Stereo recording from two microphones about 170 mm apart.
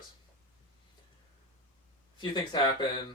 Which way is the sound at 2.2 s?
25° left (ahead or behind).